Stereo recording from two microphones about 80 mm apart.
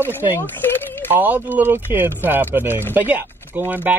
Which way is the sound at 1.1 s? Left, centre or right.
Right.